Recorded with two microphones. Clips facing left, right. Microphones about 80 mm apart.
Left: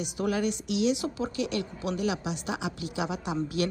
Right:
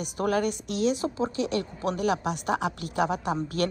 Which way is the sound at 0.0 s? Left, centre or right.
Right.